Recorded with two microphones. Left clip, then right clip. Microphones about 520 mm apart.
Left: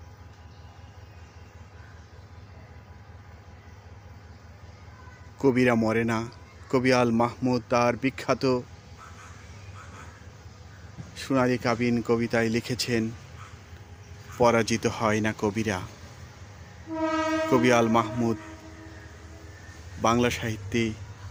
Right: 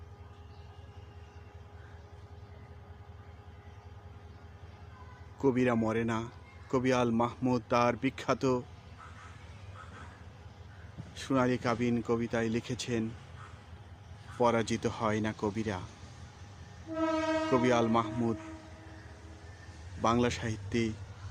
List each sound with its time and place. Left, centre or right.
5.4 s a man's voice: right
11.1 s a man's voice: right
14.3 s a man's voice: right
17.5 s a man's voice: right
20.0 s a man's voice: right